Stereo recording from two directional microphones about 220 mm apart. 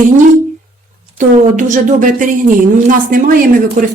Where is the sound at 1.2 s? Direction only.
35° right (ahead or behind).